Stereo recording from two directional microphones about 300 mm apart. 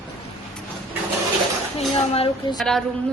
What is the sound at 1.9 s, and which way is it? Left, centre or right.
Speech, centre.